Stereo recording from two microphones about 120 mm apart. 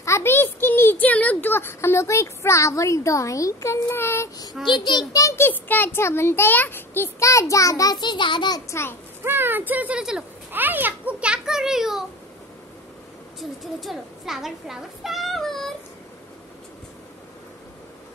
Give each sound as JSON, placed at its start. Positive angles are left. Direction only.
{"t": 0.0, "sound": "a sound", "side_deg": 20}
{"t": 1.0, "sound": "a child's voice", "side_deg": 10}
{"t": 4.6, "sound": "a child's voice", "side_deg": 40}
{"t": 9.2, "sound": "a child's voice", "side_deg": -20}
{"t": 13.4, "sound": "a child's voice", "side_deg": 0}